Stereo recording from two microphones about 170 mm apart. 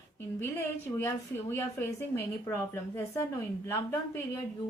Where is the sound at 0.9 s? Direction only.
15° left (ahead or behind).